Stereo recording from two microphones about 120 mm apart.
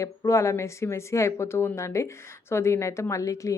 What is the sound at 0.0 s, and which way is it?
A woman's voice, 25° left (ahead or behind).